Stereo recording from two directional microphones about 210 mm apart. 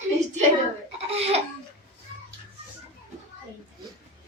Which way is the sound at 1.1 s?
30° right (ahead or behind).